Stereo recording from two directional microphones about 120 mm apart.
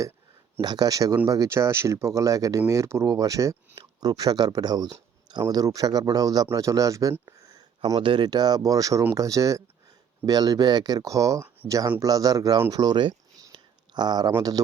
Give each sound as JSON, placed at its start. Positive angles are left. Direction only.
{"t": 0.6, "sound": "speech", "side_deg": -35}
{"t": 7.9, "sound": "speech", "side_deg": -40}
{"t": 12.7, "sound": "a sound", "side_deg": -35}